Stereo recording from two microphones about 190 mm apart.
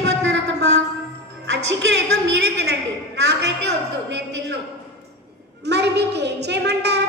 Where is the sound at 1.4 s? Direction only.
65° right (ahead or behind).